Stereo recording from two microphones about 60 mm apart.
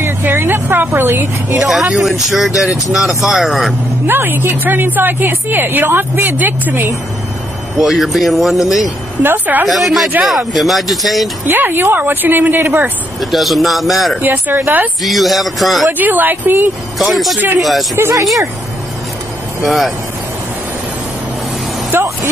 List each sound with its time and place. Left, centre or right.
0.0 s speech: right
1.6 s speech: centre
4.1 s a woman's voice: right
7.7 s speech: centre
9.2 s a woman's voice: right
9.7 s speech: centre
11.4 s a woman's voice: right
13.2 s speech: centre
14.2 s a woman's voice: right
15.0 s speech: centre
15.9 s a woman's voice: right
17.0 s speech: centre
19.6 s speech: centre
21.9 s vehicle: right